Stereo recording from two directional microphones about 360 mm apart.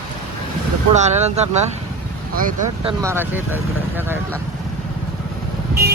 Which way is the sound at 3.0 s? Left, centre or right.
Centre.